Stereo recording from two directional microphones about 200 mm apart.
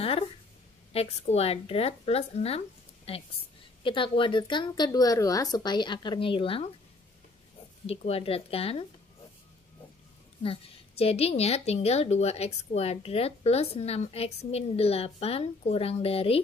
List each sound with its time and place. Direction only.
0.9 s a woman's voice: 30° left (ahead or behind)
7.8 s speech: 30° left (ahead or behind)
10.4 s a woman's voice: 30° left (ahead or behind)